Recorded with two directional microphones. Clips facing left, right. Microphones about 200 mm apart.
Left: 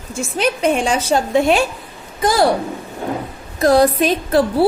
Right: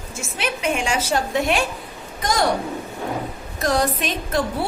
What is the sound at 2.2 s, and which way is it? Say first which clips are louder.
Speech: left 6 dB; 30° left (ahead or behind).